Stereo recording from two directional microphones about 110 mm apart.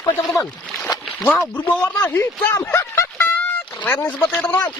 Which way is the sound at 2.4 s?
25° left (ahead or behind).